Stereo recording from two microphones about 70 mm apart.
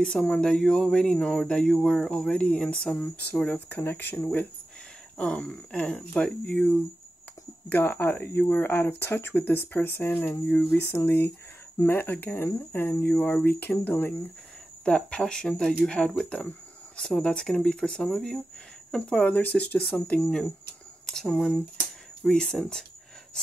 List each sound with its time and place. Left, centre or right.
0.0 s speech: centre
5.1 s speech: centre
7.7 s speech: left
10.8 s speech: left
14.9 s speech: centre